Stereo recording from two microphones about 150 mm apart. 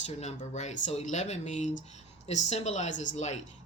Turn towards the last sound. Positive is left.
turn(degrees=50)  # may be behind; listen again after turning